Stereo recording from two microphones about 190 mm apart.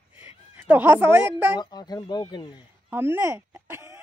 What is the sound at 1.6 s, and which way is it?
Speech, 20° left (ahead or behind).